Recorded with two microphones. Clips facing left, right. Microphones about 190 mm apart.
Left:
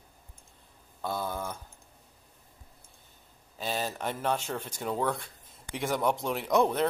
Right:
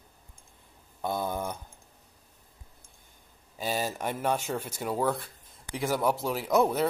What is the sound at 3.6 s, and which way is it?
Speech, 10° right (ahead or behind).